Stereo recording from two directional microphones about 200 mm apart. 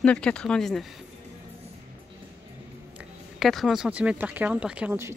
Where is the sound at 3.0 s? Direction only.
Centre (ahead or behind).